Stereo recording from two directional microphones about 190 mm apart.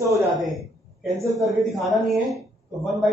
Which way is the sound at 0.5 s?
Centre (ahead or behind).